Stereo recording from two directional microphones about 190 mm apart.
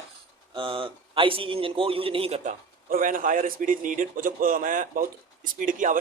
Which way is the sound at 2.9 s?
45° right (ahead or behind).